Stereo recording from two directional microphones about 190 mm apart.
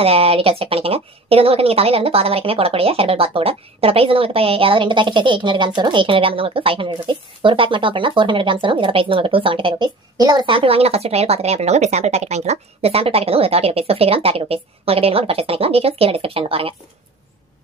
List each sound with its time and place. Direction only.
0.0 s a woman's voice: 30° right (ahead or behind)